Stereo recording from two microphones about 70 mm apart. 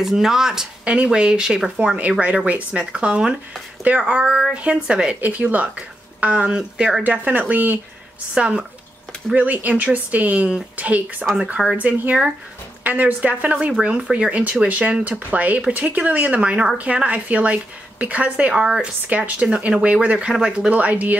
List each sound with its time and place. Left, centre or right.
0.0 s speech: centre
2.0 s speech: right
7.0 s speech: right
8.4 s speech: centre
20.7 s speech: right